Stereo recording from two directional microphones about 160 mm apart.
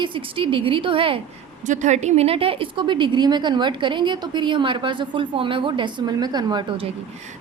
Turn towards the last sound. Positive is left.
turn(degrees=-30)  # may be behind; listen again after turning